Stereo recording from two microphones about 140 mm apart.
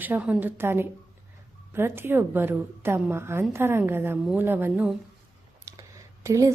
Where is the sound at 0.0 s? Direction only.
10° right (ahead or behind).